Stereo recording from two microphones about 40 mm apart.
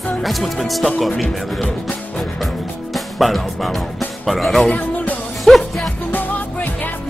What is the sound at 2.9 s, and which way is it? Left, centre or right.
Speech, centre.